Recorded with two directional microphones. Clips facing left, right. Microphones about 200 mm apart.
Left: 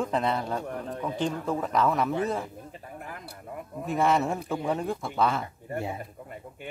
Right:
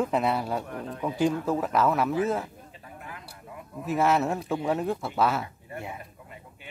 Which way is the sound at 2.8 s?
45° left (ahead or behind).